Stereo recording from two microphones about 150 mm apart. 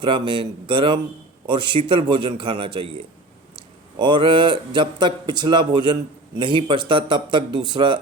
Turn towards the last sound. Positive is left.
turn(degrees=-30)  # may be behind; listen again after turning